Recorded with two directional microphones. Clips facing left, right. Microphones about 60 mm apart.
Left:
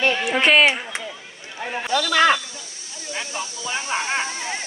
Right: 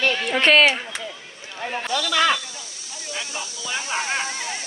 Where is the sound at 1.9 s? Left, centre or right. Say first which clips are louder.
Left 4 dB; left.